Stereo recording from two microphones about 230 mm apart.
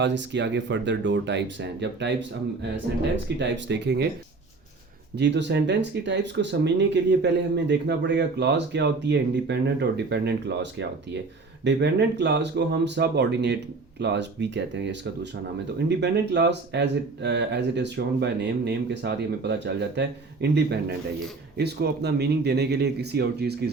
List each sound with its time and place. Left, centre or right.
0.0 s speech: right
3.2 s speech: right
5.1 s speech: right